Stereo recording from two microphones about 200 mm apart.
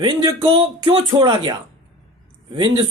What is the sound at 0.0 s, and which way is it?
Speech, 20° right (ahead or behind).